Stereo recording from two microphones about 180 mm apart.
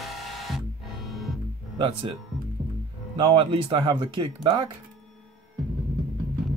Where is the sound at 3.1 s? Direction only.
25° right (ahead or behind).